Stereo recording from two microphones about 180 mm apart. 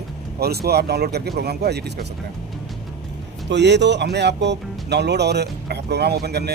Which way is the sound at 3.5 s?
75° right (ahead or behind).